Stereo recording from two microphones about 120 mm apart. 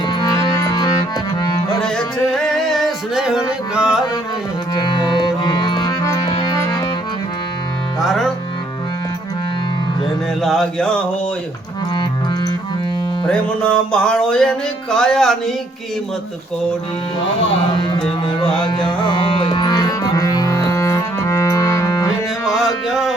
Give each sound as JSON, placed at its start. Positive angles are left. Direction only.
{"t": 0.1, "sound": "music", "side_deg": 35}
{"t": 1.8, "sound": "music", "side_deg": 5}
{"t": 4.7, "sound": "music", "side_deg": 40}
{"t": 8.0, "sound": "music", "side_deg": 0}
{"t": 10.4, "sound": "music", "side_deg": 5}
{"t": 13.2, "sound": "music", "side_deg": 5}
{"t": 18.3, "sound": "music", "side_deg": 40}
{"t": 22.4, "sound": "music", "side_deg": -5}